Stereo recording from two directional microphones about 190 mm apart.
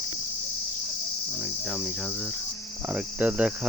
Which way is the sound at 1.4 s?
Centre (ahead or behind).